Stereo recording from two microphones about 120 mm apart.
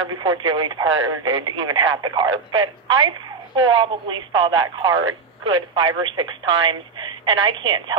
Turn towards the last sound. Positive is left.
turn(degrees=-40)  # may be behind; listen again after turning